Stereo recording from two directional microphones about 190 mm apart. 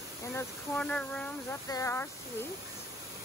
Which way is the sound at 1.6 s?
15° left (ahead or behind).